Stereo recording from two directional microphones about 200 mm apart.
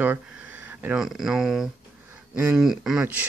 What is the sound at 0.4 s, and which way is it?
Speech, 10° right (ahead or behind).